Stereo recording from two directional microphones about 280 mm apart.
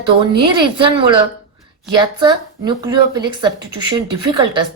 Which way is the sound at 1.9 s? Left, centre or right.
Centre.